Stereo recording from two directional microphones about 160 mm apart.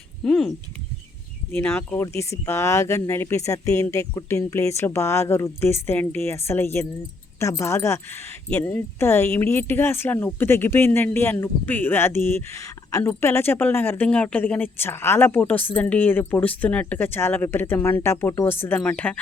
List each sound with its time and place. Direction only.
0.3 s a woman's voice: 5° left (ahead or behind)